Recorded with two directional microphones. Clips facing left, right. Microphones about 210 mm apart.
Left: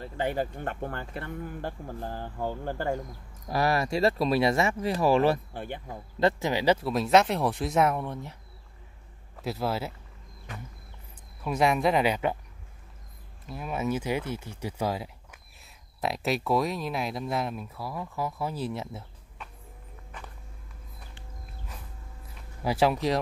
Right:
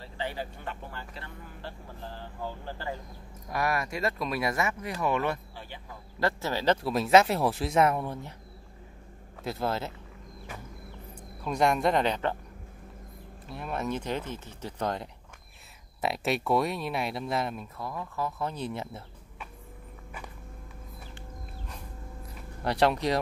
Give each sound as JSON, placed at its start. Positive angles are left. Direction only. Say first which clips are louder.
{"t": 0.0, "sound": "speech", "louder": "left 6 dB", "side_deg": 50}
{"t": 3.4, "sound": "speech", "louder": "left 4 dB", "side_deg": 30}
{"t": 5.5, "sound": "speech", "louder": "left 8 dB", "side_deg": 55}
{"t": 6.1, "sound": "speech", "louder": "left 4 dB", "side_deg": 20}
{"t": 6.8, "sound": "speech", "louder": "even", "side_deg": 0}
{"t": 9.4, "sound": "speech", "louder": "left 1 dB", "side_deg": 0}
{"t": 11.4, "sound": "speech", "louder": "left 1 dB", "side_deg": 5}
{"t": 13.5, "sound": "speech", "louder": "left 2 dB", "side_deg": 5}
{"t": 22.3, "sound": "a sound", "louder": "left 1 dB", "side_deg": 5}